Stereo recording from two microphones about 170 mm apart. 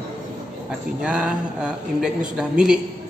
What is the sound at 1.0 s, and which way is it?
Speech, 5° right (ahead or behind).